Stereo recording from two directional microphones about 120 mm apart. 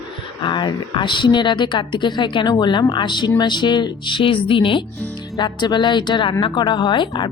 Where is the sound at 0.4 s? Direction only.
40° left (ahead or behind).